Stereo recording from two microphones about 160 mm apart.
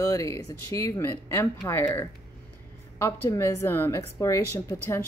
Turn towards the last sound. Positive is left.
turn(degrees=20)  # may be behind; listen again after turning